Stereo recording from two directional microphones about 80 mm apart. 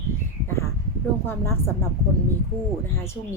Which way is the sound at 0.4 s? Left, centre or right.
Left.